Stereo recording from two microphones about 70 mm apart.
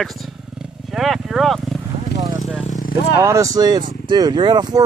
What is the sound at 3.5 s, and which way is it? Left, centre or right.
Speech, right.